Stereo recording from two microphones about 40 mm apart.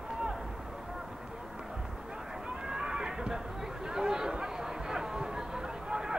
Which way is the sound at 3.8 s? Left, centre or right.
Centre.